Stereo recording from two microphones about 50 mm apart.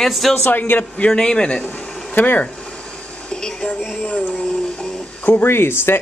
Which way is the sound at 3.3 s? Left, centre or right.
Centre.